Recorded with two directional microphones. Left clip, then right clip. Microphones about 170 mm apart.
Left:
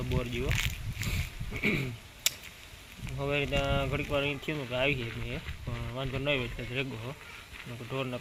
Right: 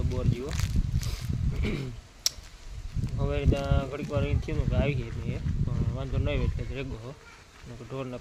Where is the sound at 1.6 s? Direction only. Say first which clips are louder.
Left 6 dB; centre (ahead or behind).